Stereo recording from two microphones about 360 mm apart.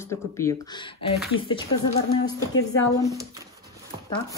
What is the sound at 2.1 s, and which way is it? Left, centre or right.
Speech, left.